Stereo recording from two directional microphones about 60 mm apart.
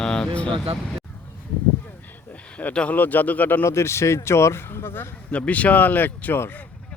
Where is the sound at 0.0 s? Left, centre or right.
Centre.